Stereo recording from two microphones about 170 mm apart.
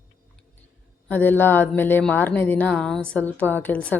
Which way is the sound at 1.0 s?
10° left (ahead or behind).